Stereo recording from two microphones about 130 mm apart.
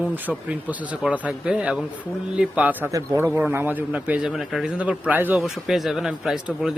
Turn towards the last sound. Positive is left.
turn(degrees=-5)  # may be behind; listen again after turning